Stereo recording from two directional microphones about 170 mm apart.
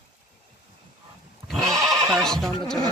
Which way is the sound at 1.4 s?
Centre (ahead or behind).